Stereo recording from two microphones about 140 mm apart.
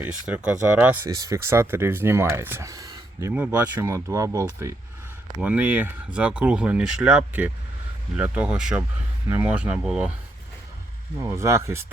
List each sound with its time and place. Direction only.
0.0 s speech: 10° right (ahead or behind)
1.0 s speech: 25° right (ahead or behind); by 10.1 s 5° right (ahead or behind)
11.2 s speech: 20° right (ahead or behind)